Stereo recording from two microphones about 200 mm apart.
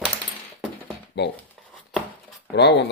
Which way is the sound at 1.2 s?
60° left (ahead or behind).